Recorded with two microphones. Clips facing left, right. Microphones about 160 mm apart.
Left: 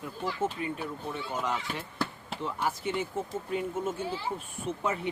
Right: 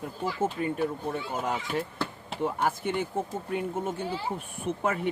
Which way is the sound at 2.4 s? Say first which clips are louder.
Right 4 dB; 55° right (ahead or behind).